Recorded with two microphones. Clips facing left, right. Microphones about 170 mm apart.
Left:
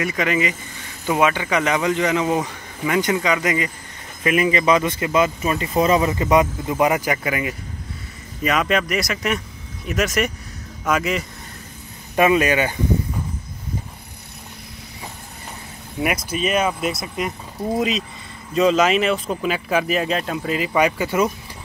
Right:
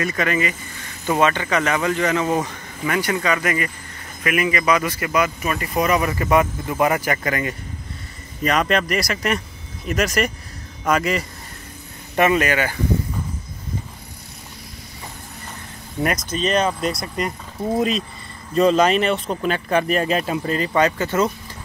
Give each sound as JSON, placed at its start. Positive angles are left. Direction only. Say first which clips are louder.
{"t": 0.0, "sound": "speech", "louder": "left 1 dB", "side_deg": 15}
{"t": 12.2, "sound": "speech", "louder": "left 1 dB", "side_deg": 15}
{"t": 16.3, "sound": "speech", "louder": "right 1 dB", "side_deg": 10}